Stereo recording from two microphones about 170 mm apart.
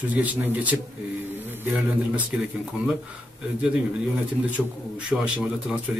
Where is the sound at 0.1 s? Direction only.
10° right (ahead or behind).